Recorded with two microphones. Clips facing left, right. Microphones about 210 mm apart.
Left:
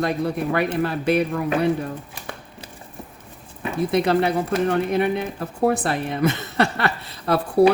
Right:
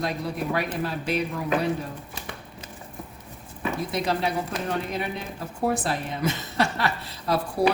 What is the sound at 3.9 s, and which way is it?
Speech, 60° left (ahead or behind).